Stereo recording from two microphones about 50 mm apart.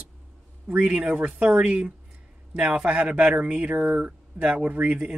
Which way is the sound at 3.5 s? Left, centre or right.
Right.